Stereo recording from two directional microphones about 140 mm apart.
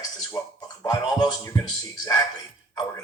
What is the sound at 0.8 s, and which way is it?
Speech, 30° left (ahead or behind).